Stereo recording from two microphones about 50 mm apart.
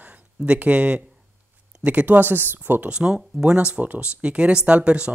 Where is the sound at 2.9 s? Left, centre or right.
Right.